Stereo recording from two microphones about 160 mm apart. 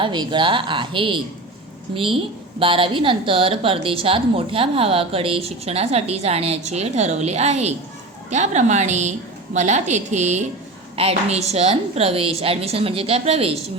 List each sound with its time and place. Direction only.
0.0 s a woman's voice: 30° right (ahead or behind)
2.6 s a woman's voice: 35° right (ahead or behind)